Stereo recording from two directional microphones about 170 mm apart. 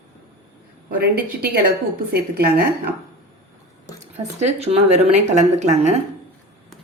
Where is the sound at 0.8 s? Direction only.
60° right (ahead or behind).